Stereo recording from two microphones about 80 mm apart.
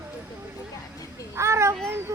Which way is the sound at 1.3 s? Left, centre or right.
Right.